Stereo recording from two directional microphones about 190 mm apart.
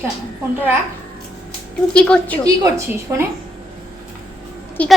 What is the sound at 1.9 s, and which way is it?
Speech, 5° left (ahead or behind).